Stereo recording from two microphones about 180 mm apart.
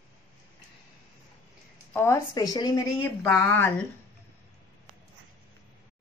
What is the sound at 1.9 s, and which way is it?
Speech, 15° left (ahead or behind).